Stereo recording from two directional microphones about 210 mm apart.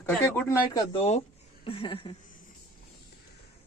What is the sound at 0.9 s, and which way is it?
Speech, 30° left (ahead or behind).